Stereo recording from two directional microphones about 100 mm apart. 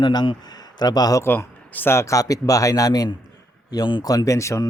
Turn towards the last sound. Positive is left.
turn(degrees=30)  # may be behind; listen again after turning